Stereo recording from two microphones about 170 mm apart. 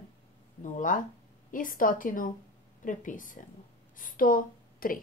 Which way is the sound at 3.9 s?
55° left (ahead or behind).